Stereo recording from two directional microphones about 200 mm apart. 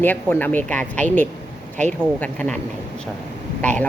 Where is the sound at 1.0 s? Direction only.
40° right (ahead or behind).